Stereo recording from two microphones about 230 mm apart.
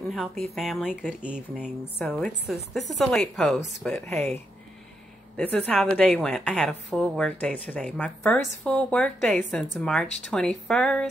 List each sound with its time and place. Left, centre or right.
0.1 s speech: centre
1.6 s a woman's voice: centre
4.1 s speech: right
5.4 s a woman's voice: centre